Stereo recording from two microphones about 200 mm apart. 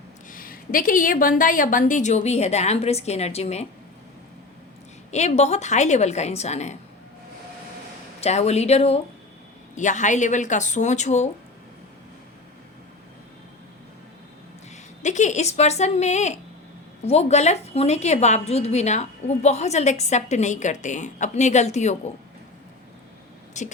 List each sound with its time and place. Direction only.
0.3 s a woman's voice: 45° left (ahead or behind)
5.1 s a woman's voice: 35° left (ahead or behind)
8.2 s a woman's voice: 35° left (ahead or behind)
15.0 s a woman's voice: 35° left (ahead or behind)
23.6 s a woman's voice: 35° left (ahead or behind)